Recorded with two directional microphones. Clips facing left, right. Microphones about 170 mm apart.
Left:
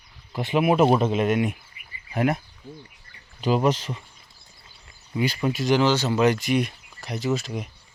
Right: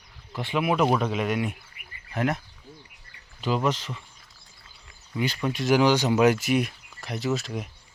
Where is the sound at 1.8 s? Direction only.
60° right (ahead or behind).